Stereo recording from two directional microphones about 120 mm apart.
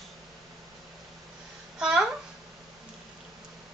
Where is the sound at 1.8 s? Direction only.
5° right (ahead or behind).